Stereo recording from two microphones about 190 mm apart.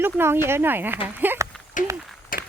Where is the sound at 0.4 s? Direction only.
10° right (ahead or behind).